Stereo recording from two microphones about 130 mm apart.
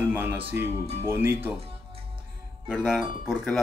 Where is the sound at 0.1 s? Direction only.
15° right (ahead or behind).